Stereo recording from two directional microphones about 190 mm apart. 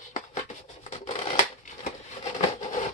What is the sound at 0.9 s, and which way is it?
Scissors, 35° left (ahead or behind).